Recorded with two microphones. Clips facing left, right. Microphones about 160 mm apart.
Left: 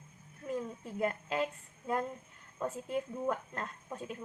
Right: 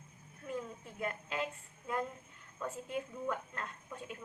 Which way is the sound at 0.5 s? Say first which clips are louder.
Left 4 dB; 35° left (ahead or behind).